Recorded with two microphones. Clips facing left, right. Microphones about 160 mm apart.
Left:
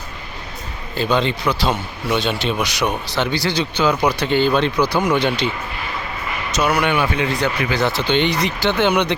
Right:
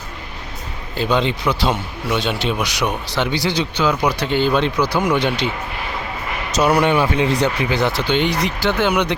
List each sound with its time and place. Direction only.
0.9 s a man's voice: 15° right (ahead or behind)
6.5 s speech: 35° right (ahead or behind)
7.6 s a man's voice: 20° right (ahead or behind)